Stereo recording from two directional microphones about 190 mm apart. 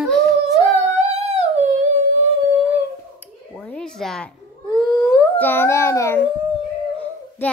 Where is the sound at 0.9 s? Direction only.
35° right (ahead or behind).